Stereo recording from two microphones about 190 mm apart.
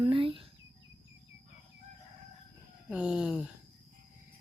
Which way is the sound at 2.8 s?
5° right (ahead or behind).